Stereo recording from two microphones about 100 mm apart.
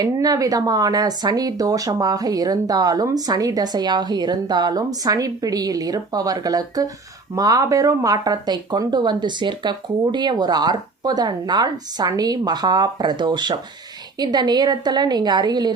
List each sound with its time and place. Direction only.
0.0 s speech: 40° right (ahead or behind)